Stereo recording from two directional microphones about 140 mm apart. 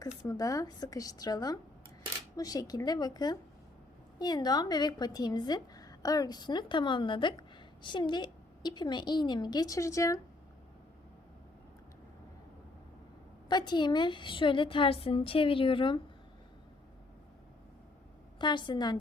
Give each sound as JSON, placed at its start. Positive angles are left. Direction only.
{"t": 0.3, "sound": "a woman's voice", "side_deg": 25}
{"t": 13.5, "sound": "a woman's voice", "side_deg": 30}
{"t": 18.3, "sound": "a woman's voice", "side_deg": 35}